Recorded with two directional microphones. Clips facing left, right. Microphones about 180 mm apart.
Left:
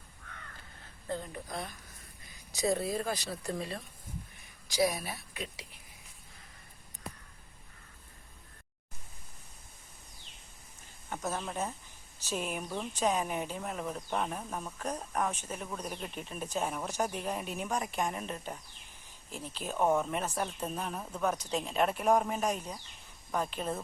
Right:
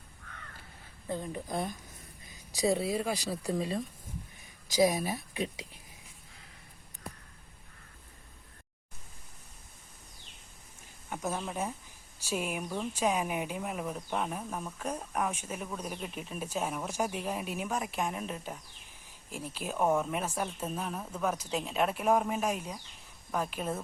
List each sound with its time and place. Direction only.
1.0 s speech: 15° right (ahead or behind)
2.6 s speech: 5° right (ahead or behind); by 5.4 s 25° right (ahead or behind)
11.1 s speech: 10° right (ahead or behind)